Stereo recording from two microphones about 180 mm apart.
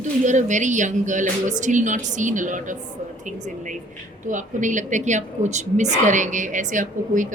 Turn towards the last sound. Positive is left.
turn(degrees=-45)  # may be behind; listen again after turning